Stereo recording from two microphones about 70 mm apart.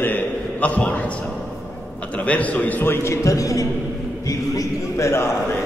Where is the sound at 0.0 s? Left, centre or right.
Left.